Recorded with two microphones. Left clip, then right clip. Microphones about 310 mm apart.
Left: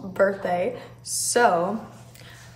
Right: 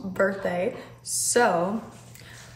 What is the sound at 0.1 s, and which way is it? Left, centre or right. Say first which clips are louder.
Speech: left 3 dB; centre.